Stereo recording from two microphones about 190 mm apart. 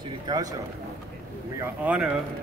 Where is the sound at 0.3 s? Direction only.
20° right (ahead or behind).